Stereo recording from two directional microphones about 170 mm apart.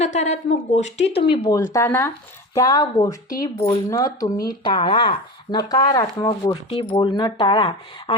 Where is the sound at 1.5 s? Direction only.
20° left (ahead or behind).